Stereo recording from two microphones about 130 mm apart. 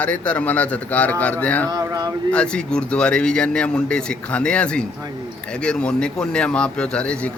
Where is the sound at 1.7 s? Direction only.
25° right (ahead or behind).